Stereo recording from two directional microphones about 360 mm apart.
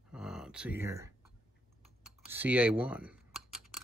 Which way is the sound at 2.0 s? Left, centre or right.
Centre.